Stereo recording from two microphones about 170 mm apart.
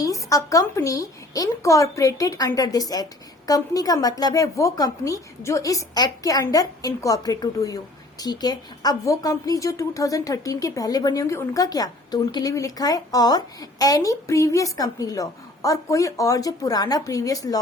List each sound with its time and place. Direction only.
0.0 s a woman's voice: 20° left (ahead or behind)